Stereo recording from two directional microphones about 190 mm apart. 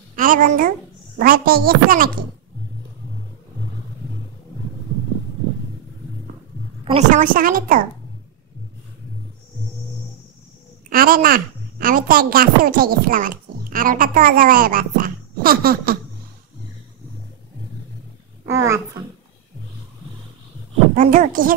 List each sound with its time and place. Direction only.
0.1 s a woman's voice: 45° right (ahead or behind)
6.8 s a woman's voice: 35° right (ahead or behind)
10.9 s a woman's voice: 50° right (ahead or behind)
18.5 s a child's voice: 15° right (ahead or behind)
20.9 s a woman's voice: 45° right (ahead or behind)